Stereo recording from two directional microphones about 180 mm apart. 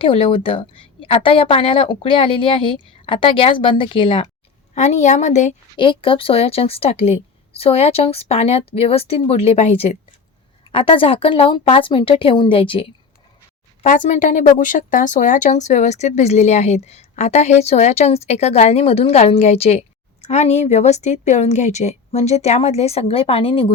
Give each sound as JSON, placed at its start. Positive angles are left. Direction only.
{"t": 0.0, "sound": "a woman's voice", "side_deg": 30}
{"t": 4.7, "sound": "speech", "side_deg": 40}
{"t": 5.7, "sound": "a woman's voice", "side_deg": 30}
{"t": 13.8, "sound": "a woman's voice", "side_deg": 45}